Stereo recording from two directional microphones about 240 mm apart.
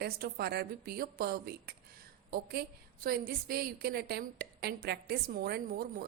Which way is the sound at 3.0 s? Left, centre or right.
Right.